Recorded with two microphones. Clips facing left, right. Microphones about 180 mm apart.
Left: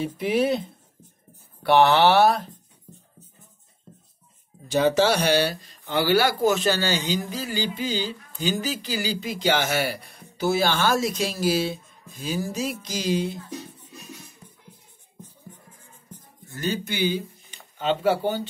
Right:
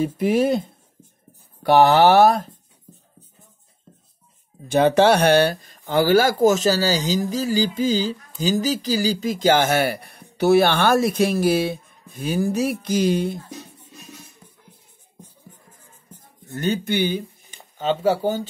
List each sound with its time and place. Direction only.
0.0 s speech: 45° right (ahead or behind)
4.6 s speech: 60° right (ahead or behind)
16.5 s speech: 55° right (ahead or behind)